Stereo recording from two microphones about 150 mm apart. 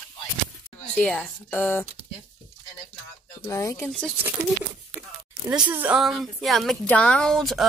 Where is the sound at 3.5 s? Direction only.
20° left (ahead or behind).